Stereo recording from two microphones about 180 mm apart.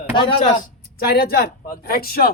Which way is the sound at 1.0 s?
55° left (ahead or behind).